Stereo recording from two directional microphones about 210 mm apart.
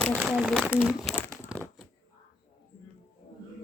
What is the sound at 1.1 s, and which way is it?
Crumpling, 10° left (ahead or behind).